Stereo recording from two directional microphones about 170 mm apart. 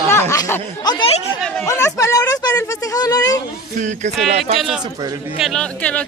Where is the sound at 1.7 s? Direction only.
15° left (ahead or behind).